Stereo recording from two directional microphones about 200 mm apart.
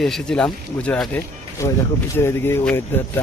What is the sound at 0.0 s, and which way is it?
Speech, centre (ahead or behind).